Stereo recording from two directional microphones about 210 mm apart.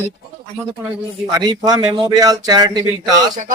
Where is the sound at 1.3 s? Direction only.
20° right (ahead or behind).